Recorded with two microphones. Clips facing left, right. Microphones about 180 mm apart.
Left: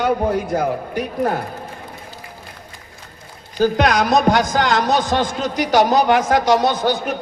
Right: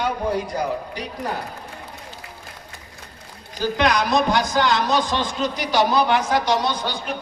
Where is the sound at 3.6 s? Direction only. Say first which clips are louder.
Left 5 dB; 45° left (ahead or behind).